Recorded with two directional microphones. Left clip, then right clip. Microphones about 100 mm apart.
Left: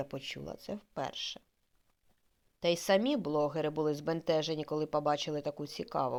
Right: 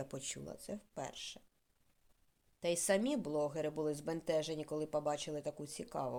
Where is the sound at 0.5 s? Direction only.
35° left (ahead or behind).